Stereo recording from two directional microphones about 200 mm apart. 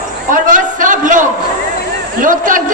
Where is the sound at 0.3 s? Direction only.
40° right (ahead or behind).